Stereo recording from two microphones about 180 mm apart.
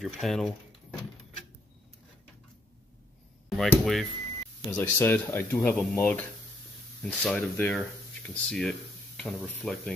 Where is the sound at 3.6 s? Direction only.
Centre (ahead or behind).